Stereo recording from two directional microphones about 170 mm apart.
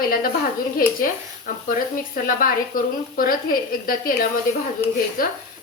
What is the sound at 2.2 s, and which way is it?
A woman's voice, 55° left (ahead or behind).